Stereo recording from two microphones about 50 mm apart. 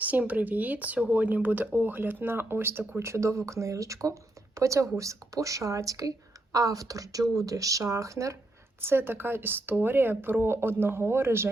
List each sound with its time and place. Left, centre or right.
0.0 s speech: right
3.0 s speech: right
7.3 s speech: right
8.8 s speech: right